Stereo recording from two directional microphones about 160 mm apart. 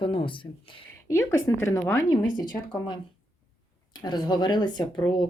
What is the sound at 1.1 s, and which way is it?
Speech, 15° left (ahead or behind).